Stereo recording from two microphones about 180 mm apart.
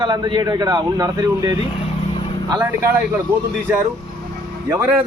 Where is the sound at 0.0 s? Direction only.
25° right (ahead or behind).